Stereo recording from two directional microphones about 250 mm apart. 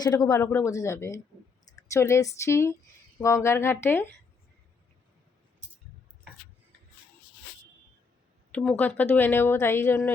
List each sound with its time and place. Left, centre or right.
0.0 s speech: centre
8.5 s speech: centre